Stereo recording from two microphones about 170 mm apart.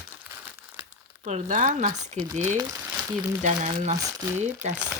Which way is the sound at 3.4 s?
45° right (ahead or behind).